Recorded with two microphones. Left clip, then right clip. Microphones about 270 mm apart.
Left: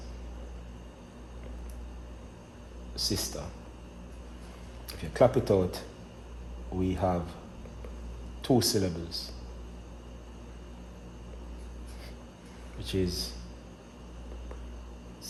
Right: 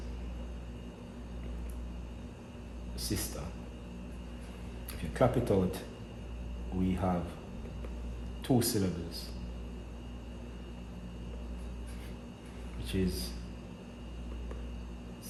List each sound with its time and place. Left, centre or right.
2.9 s speech: left
4.9 s speech: left
6.8 s a man's voice: left
8.4 s a man's voice: left
12.8 s a man's voice: left